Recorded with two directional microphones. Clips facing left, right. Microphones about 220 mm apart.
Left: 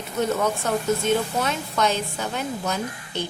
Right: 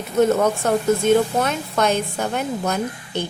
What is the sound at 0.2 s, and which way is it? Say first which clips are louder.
A woman's voice: right 7 dB; 50° right (ahead or behind).